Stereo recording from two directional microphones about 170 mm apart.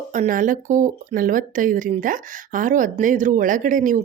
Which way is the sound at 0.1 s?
50° right (ahead or behind).